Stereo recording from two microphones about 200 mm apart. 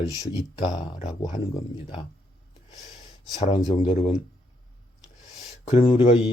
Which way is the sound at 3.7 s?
25° left (ahead or behind).